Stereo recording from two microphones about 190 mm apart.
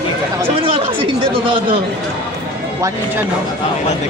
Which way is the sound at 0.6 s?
25° right (ahead or behind).